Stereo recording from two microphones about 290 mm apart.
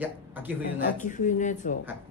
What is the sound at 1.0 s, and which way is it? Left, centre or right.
Speech, left.